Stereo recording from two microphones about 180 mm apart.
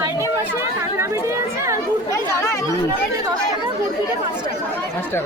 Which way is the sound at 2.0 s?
15° left (ahead or behind).